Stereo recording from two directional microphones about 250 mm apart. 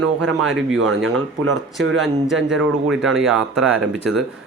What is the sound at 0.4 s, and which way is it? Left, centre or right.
Speech, centre.